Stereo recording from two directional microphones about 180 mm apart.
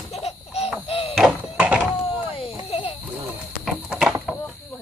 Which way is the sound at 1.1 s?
5° right (ahead or behind).